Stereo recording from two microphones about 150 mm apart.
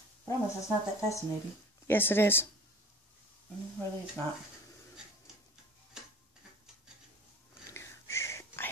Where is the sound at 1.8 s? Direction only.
15° left (ahead or behind).